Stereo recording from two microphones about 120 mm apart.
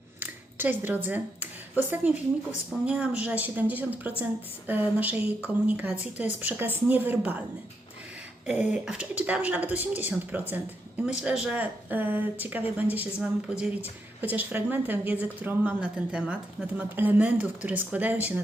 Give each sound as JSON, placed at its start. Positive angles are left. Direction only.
{"t": 0.2, "sound": "a sound", "side_deg": -15}
{"t": 2.8, "sound": "a woman's voice", "side_deg": -10}
{"t": 8.4, "sound": "a woman's voice", "side_deg": -10}